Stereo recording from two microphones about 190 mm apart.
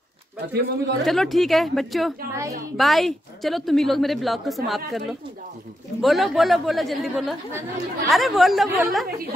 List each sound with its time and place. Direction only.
0.6 s a man's voice: 60° right (ahead or behind)
1.0 s a woman's voice: centre (ahead or behind)